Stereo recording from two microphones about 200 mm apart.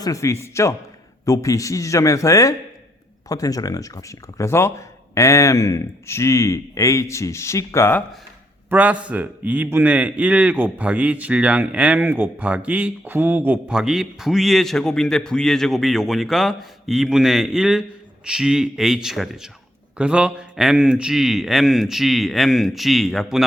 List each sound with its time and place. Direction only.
0.0 s speech: 15° left (ahead or behind)
8.7 s a man's voice: 5° right (ahead or behind)